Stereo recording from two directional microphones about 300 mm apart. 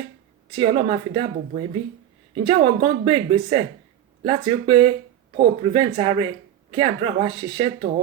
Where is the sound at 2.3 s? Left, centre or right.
Centre.